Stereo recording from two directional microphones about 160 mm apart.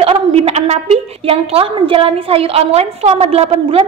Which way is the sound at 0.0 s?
35° right (ahead or behind).